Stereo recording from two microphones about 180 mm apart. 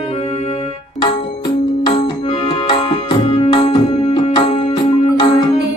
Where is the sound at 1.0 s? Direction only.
25° left (ahead or behind).